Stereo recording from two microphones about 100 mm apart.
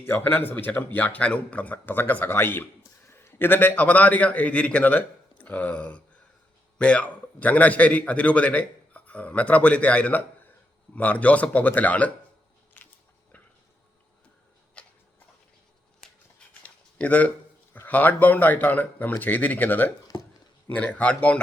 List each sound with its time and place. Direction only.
0.0 s a man's voice: 20° left (ahead or behind)
16.0 s a sound: 5° left (ahead or behind)
17.0 s speech: 15° left (ahead or behind)